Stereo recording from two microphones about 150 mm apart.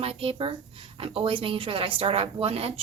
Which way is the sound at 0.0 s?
40° right (ahead or behind).